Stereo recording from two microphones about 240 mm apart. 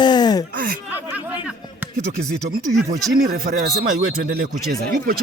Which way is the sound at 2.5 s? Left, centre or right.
Right.